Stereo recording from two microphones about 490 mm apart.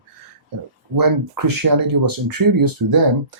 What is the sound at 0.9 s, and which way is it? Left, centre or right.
Speech, right.